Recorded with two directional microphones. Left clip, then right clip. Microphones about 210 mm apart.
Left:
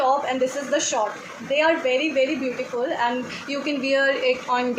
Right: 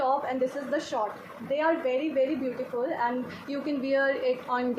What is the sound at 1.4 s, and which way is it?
Speech, 40° left (ahead or behind).